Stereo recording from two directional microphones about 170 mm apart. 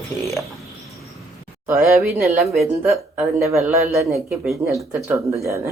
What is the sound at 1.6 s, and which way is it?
Speech, 15° right (ahead or behind).